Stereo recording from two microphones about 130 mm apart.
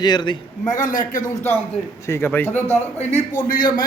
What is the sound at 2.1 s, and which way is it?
Speech, 15° left (ahead or behind).